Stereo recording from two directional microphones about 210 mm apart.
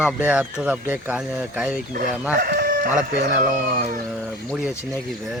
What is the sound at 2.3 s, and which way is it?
Chicken, 45° right (ahead or behind).